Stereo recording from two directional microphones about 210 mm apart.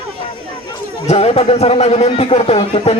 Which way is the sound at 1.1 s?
30° left (ahead or behind).